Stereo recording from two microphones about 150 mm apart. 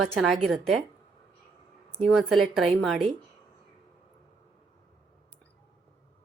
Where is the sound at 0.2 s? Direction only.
Centre (ahead or behind).